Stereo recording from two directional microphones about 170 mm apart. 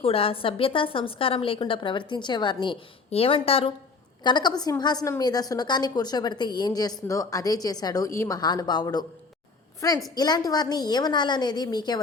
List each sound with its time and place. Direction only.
0.0 s a woman's voice: 35° left (ahead or behind)
10.2 s a woman's voice: 25° left (ahead or behind)